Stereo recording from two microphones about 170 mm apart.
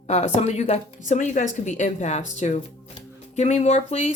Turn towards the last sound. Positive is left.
turn(degrees=40)  # may be behind; listen again after turning